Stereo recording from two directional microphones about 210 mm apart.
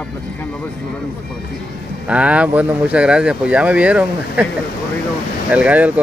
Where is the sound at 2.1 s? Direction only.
5° right (ahead or behind).